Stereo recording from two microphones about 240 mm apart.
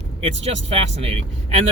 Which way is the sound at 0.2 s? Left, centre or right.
Right.